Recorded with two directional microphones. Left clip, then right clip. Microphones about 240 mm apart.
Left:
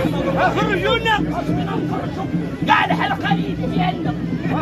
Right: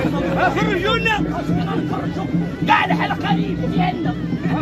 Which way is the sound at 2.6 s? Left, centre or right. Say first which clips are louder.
Even; centre.